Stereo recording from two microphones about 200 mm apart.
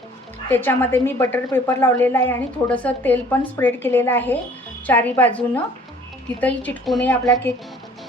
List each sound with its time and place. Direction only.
0.5 s a woman's voice: 10° left (ahead or behind)